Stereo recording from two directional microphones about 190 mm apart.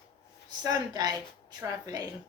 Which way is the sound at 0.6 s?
20° right (ahead or behind).